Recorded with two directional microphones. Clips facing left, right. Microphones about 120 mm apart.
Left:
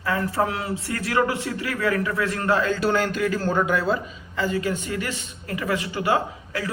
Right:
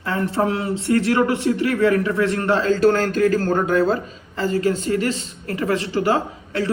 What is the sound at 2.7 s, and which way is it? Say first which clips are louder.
A man's voice: right 6 dB; 40° right (ahead or behind).